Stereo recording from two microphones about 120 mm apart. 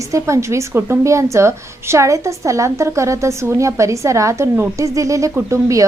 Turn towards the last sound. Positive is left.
turn(degrees=-25)  # may be behind; listen again after turning